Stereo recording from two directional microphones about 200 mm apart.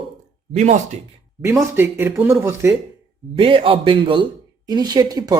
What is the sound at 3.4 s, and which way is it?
Speech, 25° right (ahead or behind).